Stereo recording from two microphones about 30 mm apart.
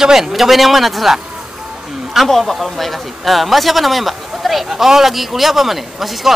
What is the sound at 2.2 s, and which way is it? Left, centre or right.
A man's voice, centre.